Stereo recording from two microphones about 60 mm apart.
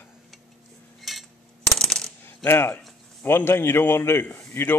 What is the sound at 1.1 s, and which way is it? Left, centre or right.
Cutlery, centre.